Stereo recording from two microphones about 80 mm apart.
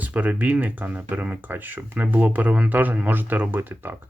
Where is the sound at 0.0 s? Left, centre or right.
Centre.